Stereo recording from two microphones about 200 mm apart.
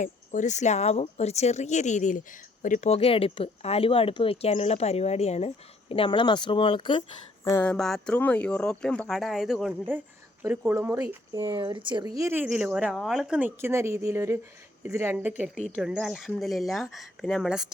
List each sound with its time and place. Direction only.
0.0 s speech: 40° left (ahead or behind)
7.4 s a woman's voice: 10° left (ahead or behind); by 11.6 s 15° right (ahead or behind)
11.6 s speech: 25° right (ahead or behind)
12.2 s a woman's voice: 10° right (ahead or behind)